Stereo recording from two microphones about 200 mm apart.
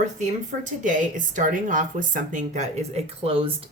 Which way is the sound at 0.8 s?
40° right (ahead or behind).